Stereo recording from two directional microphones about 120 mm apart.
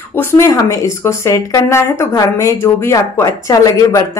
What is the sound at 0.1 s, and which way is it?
Speech, 20° left (ahead or behind).